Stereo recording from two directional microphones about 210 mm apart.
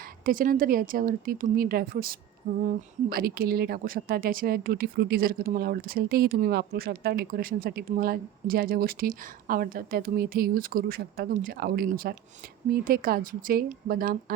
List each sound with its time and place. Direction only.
0.3 s speech: 40° right (ahead or behind)